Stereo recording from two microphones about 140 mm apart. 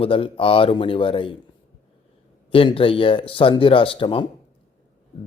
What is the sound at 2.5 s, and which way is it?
A man's voice, 40° left (ahead or behind).